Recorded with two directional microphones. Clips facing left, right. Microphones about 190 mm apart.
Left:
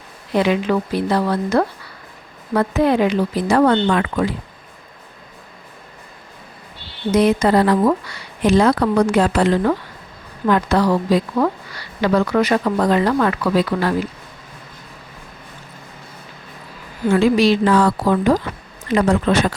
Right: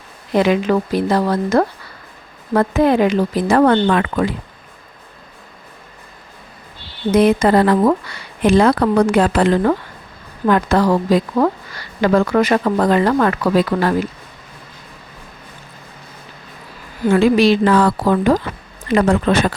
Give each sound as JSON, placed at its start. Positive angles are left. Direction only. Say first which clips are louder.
{"t": 0.3, "sound": "a woman's voice", "louder": "right 2 dB", "side_deg": -45}
{"t": 7.1, "sound": "a woman's voice", "louder": "right 2 dB", "side_deg": -55}
{"t": 17.1, "sound": "a woman's voice", "louder": "right 2 dB", "side_deg": -55}